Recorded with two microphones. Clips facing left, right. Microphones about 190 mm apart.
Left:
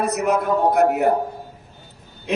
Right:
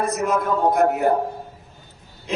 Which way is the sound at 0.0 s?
65° left (ahead or behind).